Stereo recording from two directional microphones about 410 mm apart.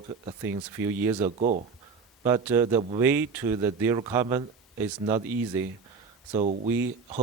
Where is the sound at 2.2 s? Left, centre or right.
Centre.